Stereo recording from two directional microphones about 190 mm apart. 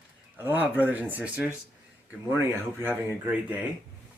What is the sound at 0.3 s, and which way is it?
Speech, 10° right (ahead or behind).